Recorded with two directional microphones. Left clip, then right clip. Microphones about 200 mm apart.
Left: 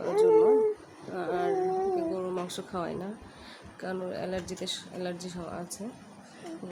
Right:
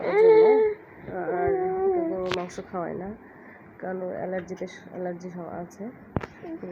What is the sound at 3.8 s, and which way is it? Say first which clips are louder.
Speech: right 3 dB; 10° left (ahead or behind).